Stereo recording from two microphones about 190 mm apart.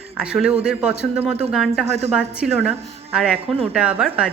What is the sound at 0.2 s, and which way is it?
A woman's voice, 5° right (ahead or behind).